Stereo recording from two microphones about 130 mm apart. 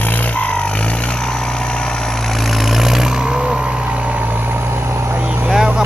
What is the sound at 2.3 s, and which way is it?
Vehicle, centre (ahead or behind).